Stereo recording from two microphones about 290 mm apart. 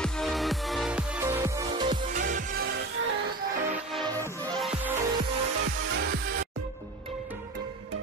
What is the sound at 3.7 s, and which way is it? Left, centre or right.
Music, centre.